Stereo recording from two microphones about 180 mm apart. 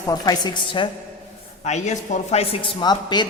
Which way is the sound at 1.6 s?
40° left (ahead or behind).